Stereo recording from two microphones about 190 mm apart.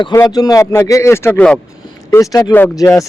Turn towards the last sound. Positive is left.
turn(degrees=15)  # may be behind; listen again after turning